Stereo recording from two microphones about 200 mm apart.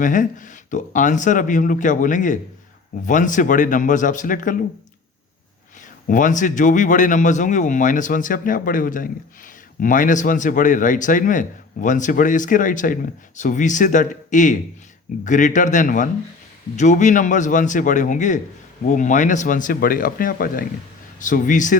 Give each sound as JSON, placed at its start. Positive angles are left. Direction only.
{"t": 0.0, "sound": "speech", "side_deg": 40}
{"t": 6.1, "sound": "speech", "side_deg": 40}